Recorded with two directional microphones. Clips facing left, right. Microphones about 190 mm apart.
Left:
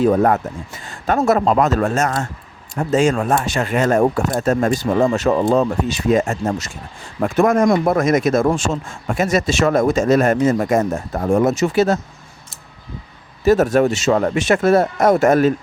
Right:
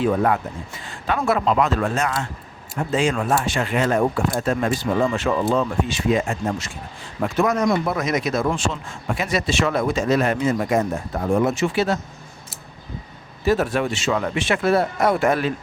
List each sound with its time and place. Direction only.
0.0 s speech: 40° left (ahead or behind)
13.4 s speech: 45° left (ahead or behind)